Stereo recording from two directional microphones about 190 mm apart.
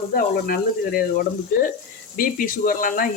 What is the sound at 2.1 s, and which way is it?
Speech, 45° left (ahead or behind).